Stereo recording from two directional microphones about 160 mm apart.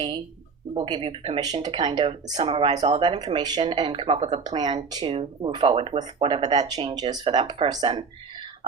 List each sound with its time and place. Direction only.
0.7 s speech: 30° right (ahead or behind)